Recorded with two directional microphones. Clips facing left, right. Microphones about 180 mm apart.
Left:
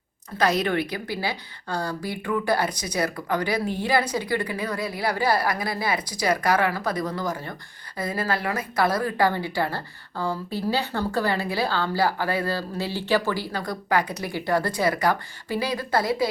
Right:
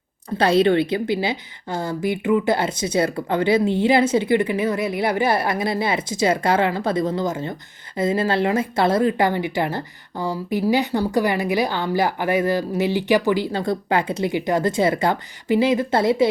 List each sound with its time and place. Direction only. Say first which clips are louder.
0.3 s a woman's voice: right 6 dB; 30° right (ahead or behind)